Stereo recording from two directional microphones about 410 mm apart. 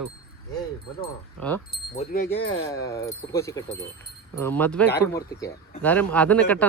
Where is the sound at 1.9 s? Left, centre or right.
Centre.